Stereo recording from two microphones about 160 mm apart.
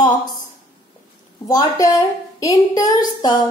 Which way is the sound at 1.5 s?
25° left (ahead or behind).